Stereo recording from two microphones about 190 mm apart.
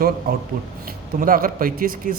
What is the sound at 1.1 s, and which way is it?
Speech, 45° right (ahead or behind).